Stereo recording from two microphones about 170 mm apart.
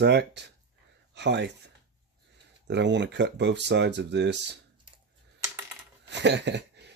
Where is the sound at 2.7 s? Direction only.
90° right.